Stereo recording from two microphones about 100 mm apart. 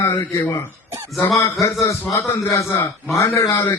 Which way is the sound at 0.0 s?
30° left (ahead or behind).